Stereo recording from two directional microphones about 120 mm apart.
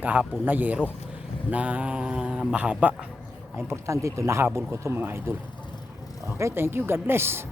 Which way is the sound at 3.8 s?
25° right (ahead or behind).